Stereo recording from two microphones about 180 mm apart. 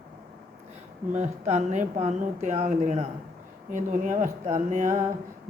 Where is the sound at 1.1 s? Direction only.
40° right (ahead or behind).